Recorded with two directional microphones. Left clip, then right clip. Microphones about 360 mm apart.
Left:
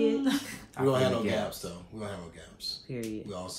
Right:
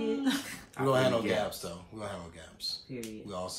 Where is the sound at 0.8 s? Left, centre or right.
Centre.